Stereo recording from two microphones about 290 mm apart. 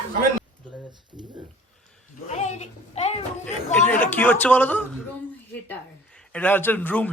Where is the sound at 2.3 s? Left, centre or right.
Left.